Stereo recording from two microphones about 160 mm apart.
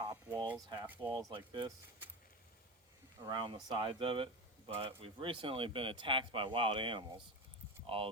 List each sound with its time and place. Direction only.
0.0 s a sound: 25° right (ahead or behind)
1.3 s speech: 30° right (ahead or behind)
3.2 s speech: 25° right (ahead or behind)